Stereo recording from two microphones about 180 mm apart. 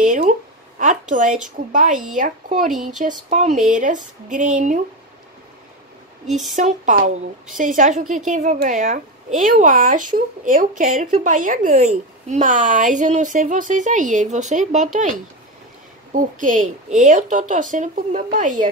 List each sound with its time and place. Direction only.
0.0 s a sound: 45° right (ahead or behind)
1.7 s speech: 45° right (ahead or behind)
6.2 s speech: centre (ahead or behind)
6.5 s speech: 45° right (ahead or behind)